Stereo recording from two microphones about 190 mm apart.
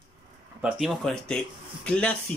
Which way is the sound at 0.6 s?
5° right (ahead or behind).